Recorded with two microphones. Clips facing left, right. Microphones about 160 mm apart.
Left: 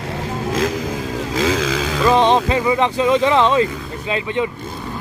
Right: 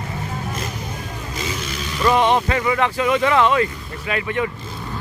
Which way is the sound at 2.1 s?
20° left (ahead or behind).